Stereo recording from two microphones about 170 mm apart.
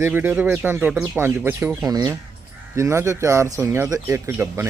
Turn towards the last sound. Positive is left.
turn(degrees=-10)  # may be behind; listen again after turning